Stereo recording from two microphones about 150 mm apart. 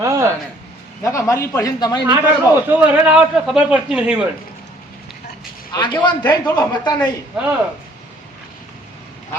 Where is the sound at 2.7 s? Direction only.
10° right (ahead or behind).